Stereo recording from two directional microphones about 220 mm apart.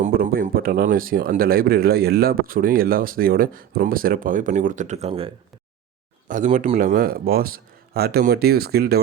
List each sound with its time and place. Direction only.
0.0 s speech: 40° right (ahead or behind)